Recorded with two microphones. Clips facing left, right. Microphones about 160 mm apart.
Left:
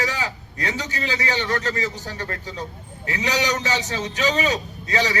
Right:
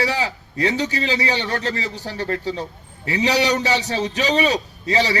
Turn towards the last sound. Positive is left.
turn(degrees=-30)  # may be behind; listen again after turning